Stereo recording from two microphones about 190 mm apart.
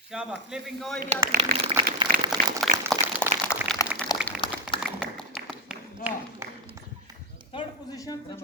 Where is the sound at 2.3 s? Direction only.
20° right (ahead or behind).